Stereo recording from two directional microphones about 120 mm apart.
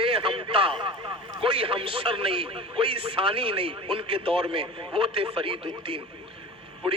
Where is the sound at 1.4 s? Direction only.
45° right (ahead or behind).